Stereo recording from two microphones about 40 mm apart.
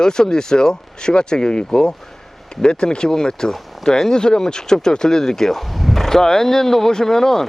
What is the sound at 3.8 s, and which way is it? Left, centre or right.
Speech, centre.